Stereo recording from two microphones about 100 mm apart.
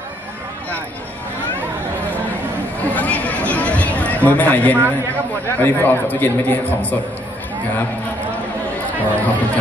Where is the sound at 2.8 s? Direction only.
15° left (ahead or behind).